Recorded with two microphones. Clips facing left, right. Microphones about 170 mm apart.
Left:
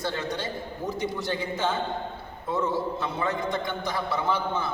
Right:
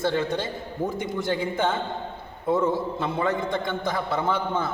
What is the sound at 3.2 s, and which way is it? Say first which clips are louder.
A man's voice: right 2 dB; 50° right (ahead or behind).